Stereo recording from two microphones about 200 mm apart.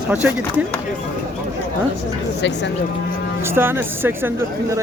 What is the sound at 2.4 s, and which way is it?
Speech, 60° left (ahead or behind).